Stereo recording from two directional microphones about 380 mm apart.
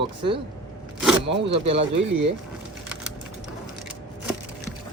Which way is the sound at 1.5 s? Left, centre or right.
Centre.